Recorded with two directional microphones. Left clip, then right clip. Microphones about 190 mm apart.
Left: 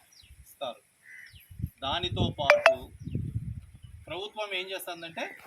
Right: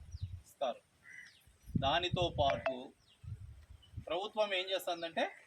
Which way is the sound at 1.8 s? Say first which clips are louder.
Left 2 dB; 15° right (ahead or behind).